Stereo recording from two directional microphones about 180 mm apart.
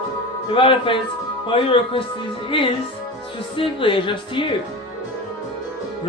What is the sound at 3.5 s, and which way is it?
Music, 30° left (ahead or behind).